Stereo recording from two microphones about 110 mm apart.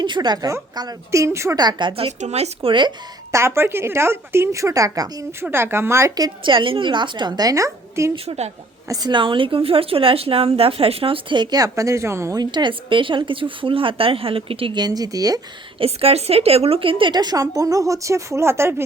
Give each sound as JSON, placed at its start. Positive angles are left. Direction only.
{"t": 0.0, "sound": "speech", "side_deg": -40}
{"t": 1.5, "sound": "speech", "side_deg": -40}
{"t": 1.9, "sound": "a woman's voice", "side_deg": -65}
{"t": 3.3, "sound": "speech", "side_deg": -25}
{"t": 5.4, "sound": "speech", "side_deg": -20}
{"t": 6.4, "sound": "speech", "side_deg": -50}
{"t": 8.1, "sound": "a woman's voice", "side_deg": -60}
{"t": 8.9, "sound": "a woman's voice", "side_deg": -40}
{"t": 11.6, "sound": "speech", "side_deg": -30}
{"t": 12.4, "sound": "speech", "side_deg": -45}
{"t": 14.8, "sound": "speech", "side_deg": -35}
{"t": 15.8, "sound": "speech", "side_deg": -60}